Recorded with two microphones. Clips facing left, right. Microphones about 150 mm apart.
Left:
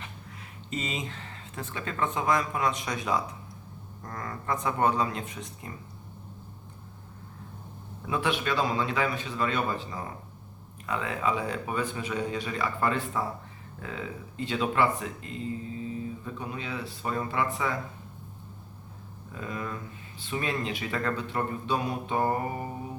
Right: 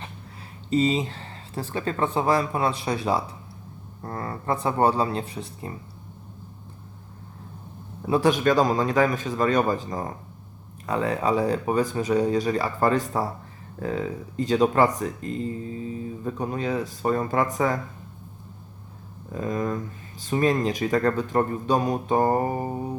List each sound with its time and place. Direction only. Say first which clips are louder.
0.7 s speech: right 12 dB; 30° right (ahead or behind)
8.0 s speech: right 9 dB; 35° right (ahead or behind)
19.3 s speech: right 9 dB; 40° right (ahead or behind)